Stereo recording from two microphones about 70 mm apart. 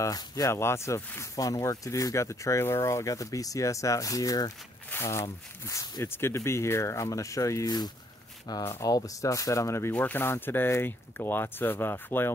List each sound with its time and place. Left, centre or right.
0.0 s speech: left
0.5 s speech: left
1.4 s speech: left
4.9 s speech: left
5.7 s speech: left
6.0 s speech: left
8.5 s speech: left
8.8 s speech: left
9.9 s speech: left